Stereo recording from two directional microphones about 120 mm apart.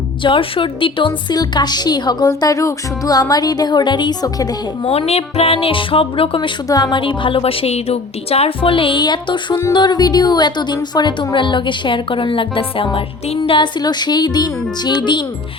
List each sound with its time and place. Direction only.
0.2 s a woman's voice: 45° left (ahead or behind)
4.8 s a woman's voice: 55° left (ahead or behind)
6.7 s a woman's voice: 35° left (ahead or behind)